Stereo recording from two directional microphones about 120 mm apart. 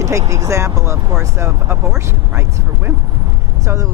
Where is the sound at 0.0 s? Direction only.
25° right (ahead or behind).